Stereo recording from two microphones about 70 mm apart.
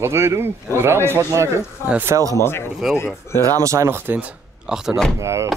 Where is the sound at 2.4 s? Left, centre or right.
Left.